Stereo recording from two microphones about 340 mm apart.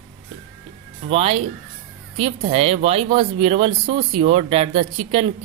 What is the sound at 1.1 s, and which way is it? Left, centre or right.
Speech, centre.